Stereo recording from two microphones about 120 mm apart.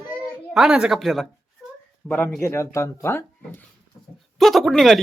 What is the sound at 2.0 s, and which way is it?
Speech, 15° left (ahead or behind).